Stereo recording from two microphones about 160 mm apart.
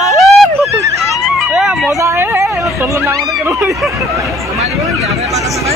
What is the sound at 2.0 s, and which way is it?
Speech, 15° right (ahead or behind).